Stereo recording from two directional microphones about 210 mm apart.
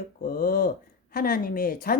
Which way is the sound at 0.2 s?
45° left (ahead or behind).